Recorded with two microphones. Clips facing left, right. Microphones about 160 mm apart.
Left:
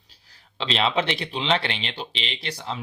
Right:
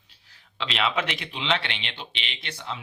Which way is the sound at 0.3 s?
30° left (ahead or behind).